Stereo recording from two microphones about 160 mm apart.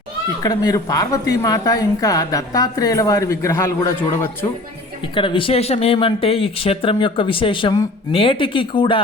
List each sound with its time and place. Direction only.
0.4 s speech: 25° left (ahead or behind)
5.1 s speech: 30° left (ahead or behind)